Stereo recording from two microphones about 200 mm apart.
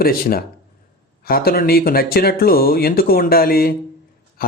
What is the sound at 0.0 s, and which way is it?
A man's voice, 45° left (ahead or behind).